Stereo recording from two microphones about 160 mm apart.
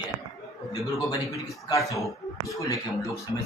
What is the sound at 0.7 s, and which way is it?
Speech, 20° left (ahead or behind).